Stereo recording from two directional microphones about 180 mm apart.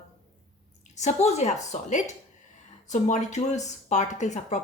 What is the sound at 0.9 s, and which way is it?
Speech, 40° left (ahead or behind).